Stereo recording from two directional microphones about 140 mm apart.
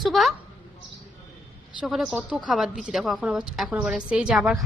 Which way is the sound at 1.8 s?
5° right (ahead or behind).